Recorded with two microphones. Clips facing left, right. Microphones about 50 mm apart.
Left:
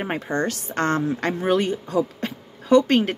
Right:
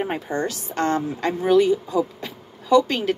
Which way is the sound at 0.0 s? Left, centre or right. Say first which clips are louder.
Even; left.